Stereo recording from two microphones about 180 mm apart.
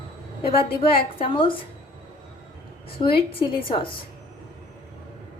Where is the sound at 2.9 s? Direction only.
30° left (ahead or behind).